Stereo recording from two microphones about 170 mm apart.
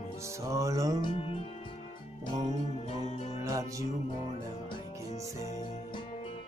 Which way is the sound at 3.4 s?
20° right (ahead or behind).